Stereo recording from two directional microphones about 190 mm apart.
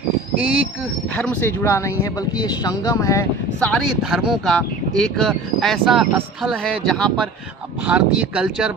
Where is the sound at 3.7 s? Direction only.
Centre (ahead or behind).